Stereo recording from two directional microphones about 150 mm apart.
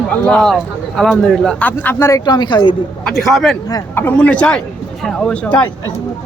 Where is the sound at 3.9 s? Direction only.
15° left (ahead or behind).